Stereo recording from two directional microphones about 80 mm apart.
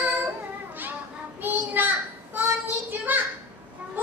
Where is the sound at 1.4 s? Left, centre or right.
Right.